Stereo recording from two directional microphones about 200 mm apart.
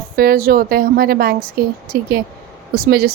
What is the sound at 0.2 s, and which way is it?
A woman's voice, 45° right (ahead or behind).